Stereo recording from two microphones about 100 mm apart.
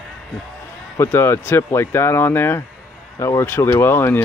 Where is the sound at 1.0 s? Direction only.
25° left (ahead or behind).